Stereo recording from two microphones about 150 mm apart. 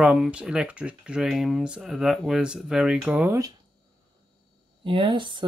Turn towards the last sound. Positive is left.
turn(degrees=-30)  # may be behind; listen again after turning